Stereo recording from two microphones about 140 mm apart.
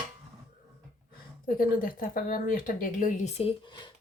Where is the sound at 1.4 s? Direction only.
85° left; by 3.3 s 65° left (ahead or behind).